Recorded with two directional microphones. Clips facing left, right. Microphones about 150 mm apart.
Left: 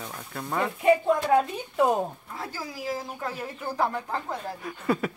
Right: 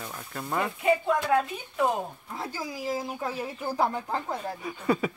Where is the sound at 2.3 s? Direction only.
15° right (ahead or behind).